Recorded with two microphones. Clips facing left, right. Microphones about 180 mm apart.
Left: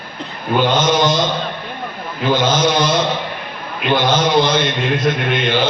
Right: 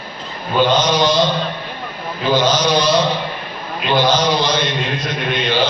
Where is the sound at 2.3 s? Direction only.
50° left (ahead or behind).